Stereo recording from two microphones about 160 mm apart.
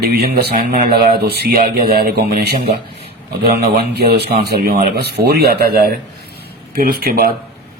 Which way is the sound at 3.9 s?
85° right.